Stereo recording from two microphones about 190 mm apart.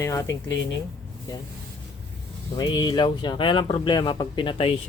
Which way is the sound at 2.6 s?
25° left (ahead or behind).